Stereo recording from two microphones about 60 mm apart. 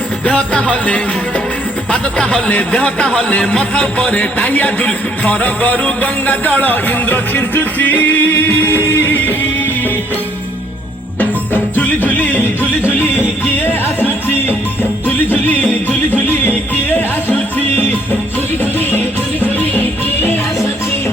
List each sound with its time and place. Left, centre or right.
0.3 s music: left
11.2 s music: left